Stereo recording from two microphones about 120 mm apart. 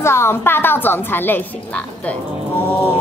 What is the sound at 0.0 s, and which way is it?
A woman's voice, 20° left (ahead or behind).